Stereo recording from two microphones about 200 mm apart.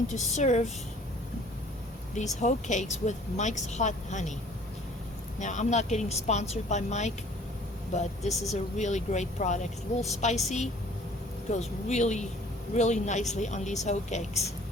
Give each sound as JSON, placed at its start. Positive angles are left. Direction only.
{"t": 0.1, "sound": "speech", "side_deg": 35}
{"t": 2.1, "sound": "speech", "side_deg": 35}
{"t": 5.4, "sound": "speech", "side_deg": 35}